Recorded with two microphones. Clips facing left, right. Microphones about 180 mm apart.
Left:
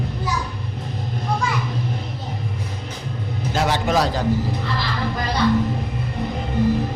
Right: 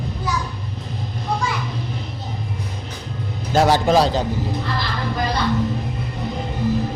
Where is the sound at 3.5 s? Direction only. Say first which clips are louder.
Right 5 dB; 40° right (ahead or behind).